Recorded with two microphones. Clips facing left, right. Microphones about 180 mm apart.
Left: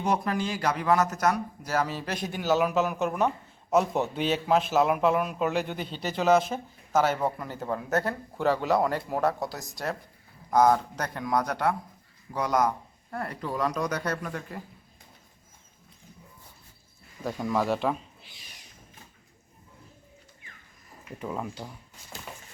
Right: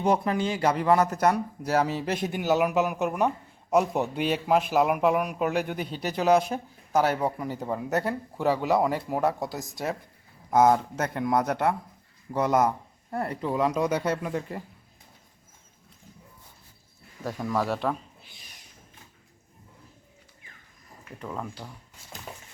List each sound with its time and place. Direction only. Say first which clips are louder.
0.0 s speech: right 3 dB; 25° right (ahead or behind)
8.7 s speech: right 1 dB; 5° right (ahead or behind)
10.7 s speech: right 1 dB; 25° right (ahead or behind)
17.2 s speech: left 1 dB; centre (ahead or behind)
21.2 s speech: left 2 dB; 5° left (ahead or behind)